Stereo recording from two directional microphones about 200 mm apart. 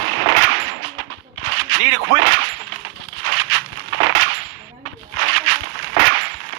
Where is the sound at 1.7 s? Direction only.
90° right.